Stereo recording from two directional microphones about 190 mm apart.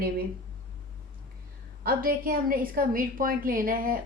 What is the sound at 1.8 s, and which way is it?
Speech, 50° right (ahead or behind).